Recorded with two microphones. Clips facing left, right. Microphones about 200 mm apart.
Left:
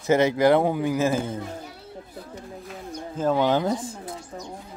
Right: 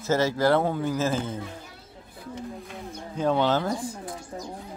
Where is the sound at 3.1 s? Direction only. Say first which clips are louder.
Left 2 dB; 5° left (ahead or behind); by 3.9 s 20° left (ahead or behind).